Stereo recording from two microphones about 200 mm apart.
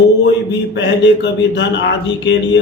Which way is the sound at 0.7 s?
65° left (ahead or behind).